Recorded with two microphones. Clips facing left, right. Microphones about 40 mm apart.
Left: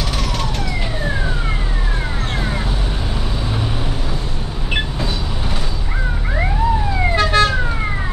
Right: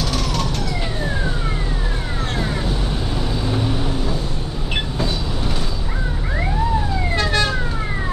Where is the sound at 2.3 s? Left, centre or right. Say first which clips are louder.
Even; centre.